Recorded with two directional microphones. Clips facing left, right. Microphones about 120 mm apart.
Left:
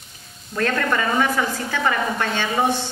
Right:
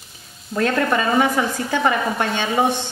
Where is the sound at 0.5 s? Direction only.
20° right (ahead or behind).